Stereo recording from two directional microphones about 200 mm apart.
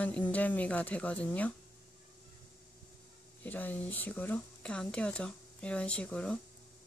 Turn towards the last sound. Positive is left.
turn(degrees=5)  # may be behind; listen again after turning